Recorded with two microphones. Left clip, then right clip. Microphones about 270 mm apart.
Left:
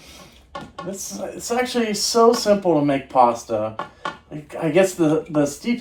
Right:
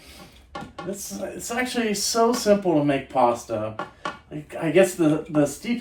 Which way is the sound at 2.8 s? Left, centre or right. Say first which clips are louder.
Left 4 dB; centre.